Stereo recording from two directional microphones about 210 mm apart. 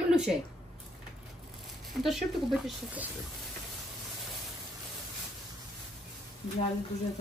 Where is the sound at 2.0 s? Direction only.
Centre (ahead or behind).